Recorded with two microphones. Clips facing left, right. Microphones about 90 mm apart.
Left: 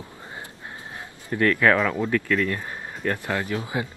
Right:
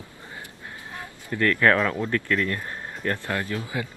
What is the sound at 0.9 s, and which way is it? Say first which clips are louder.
Speech: left 2 dB; 20° left (ahead or behind).